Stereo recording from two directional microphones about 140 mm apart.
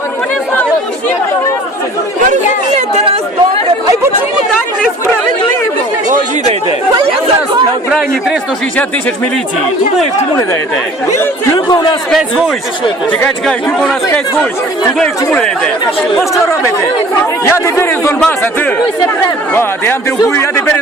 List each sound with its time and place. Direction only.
7.9 s a sound: 5° right (ahead or behind)
11.5 s a man's voice: 30° left (ahead or behind)
13.1 s a man's voice: 10° left (ahead or behind)
14.9 s speech: 5° left (ahead or behind)
16.3 s speech: 20° left (ahead or behind)
18.2 s a man's voice: 10° left (ahead or behind)